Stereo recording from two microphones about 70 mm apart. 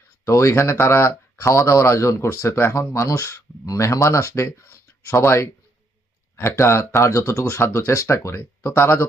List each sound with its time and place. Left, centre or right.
0.3 s speech: left